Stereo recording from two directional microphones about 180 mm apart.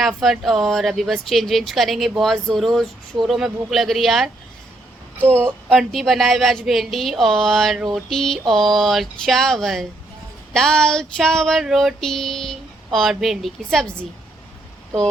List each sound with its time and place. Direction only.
0.0 s speech: centre (ahead or behind)
5.6 s speech: centre (ahead or behind)